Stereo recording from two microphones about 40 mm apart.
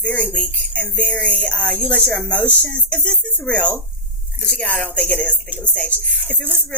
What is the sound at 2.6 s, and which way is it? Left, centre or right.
Speech, left.